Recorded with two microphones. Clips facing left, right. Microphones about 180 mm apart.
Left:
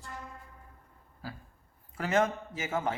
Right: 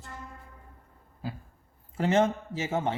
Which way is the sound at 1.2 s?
20° right (ahead or behind).